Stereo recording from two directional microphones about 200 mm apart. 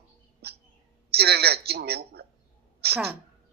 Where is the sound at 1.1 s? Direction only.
55° right (ahead or behind).